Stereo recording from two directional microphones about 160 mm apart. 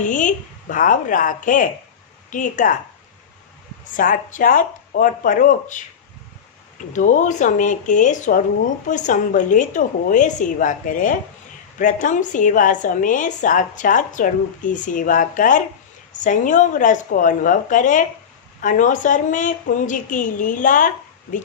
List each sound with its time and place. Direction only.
0.0 s a woman's voice: 50° left (ahead or behind)
3.9 s a woman's voice: 60° left (ahead or behind)
6.9 s a woman's voice: 50° left (ahead or behind)